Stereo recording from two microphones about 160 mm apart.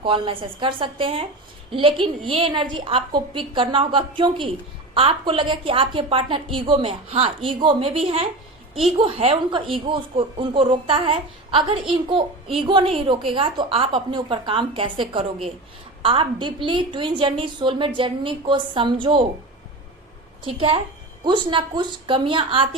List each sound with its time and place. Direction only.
0.0 s speech: 35° right (ahead or behind)
20.4 s speech: 35° right (ahead or behind)